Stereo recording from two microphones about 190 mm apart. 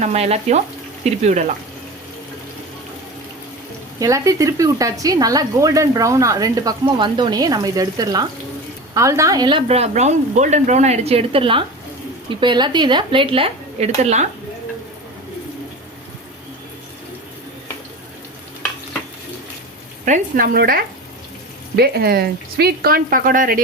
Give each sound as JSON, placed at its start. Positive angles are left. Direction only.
{"t": 0.0, "sound": "speech", "side_deg": -35}
{"t": 4.0, "sound": "speech", "side_deg": -15}
{"t": 20.1, "sound": "speech", "side_deg": -50}